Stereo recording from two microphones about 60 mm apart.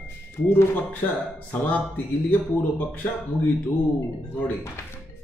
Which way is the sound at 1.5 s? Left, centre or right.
Left.